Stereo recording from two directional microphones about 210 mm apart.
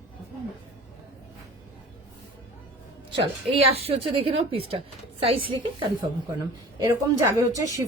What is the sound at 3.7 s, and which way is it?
A woman's voice, 30° right (ahead or behind).